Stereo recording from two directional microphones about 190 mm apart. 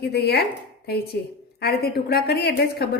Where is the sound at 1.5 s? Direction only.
55° left (ahead or behind).